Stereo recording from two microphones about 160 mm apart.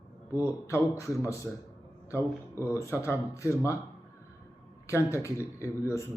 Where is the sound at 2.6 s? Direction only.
15° left (ahead or behind).